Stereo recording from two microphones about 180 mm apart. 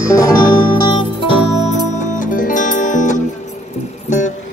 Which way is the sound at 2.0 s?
45° left (ahead or behind).